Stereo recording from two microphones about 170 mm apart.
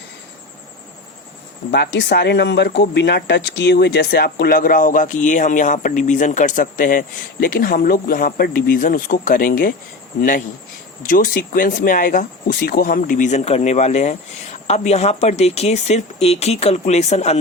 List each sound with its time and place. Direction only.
1.7 s speech: 80° left; by 17.3 s 40° left (ahead or behind)